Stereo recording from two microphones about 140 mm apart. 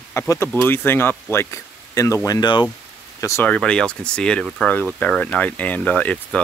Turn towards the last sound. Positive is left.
turn(degrees=10)  # may be behind; listen again after turning